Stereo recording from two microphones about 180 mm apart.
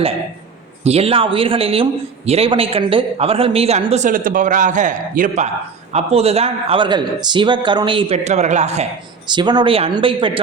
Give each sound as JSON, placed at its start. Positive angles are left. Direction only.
{"t": 0.9, "sound": "a man's voice", "side_deg": -35}
{"t": 9.2, "sound": "speech", "side_deg": -25}